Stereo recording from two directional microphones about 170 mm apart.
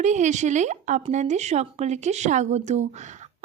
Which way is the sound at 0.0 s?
45° right (ahead or behind).